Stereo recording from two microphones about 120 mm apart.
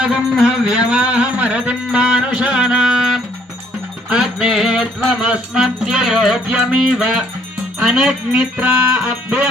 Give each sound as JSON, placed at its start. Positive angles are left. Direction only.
{"t": 0.0, "sound": "music", "side_deg": -5}
{"t": 4.1, "sound": "music", "side_deg": -5}